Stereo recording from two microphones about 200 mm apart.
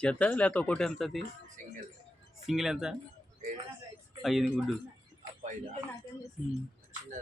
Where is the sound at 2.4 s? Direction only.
Centre (ahead or behind).